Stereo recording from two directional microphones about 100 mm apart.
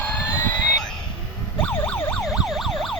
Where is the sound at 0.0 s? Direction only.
20° left (ahead or behind).